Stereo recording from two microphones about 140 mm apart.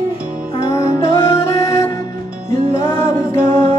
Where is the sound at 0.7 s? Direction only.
20° left (ahead or behind).